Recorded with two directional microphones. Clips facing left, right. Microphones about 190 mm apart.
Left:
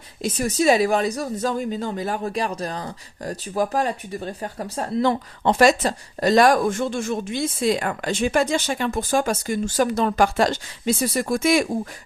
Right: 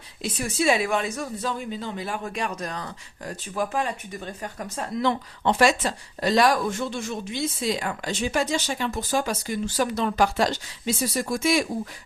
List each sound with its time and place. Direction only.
0.2 s speech: 40° left (ahead or behind)